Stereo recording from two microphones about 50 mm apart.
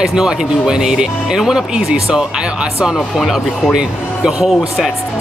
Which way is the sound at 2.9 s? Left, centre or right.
Centre.